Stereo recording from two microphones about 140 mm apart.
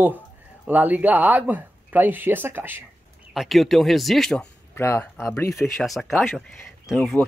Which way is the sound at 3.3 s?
Centre (ahead or behind).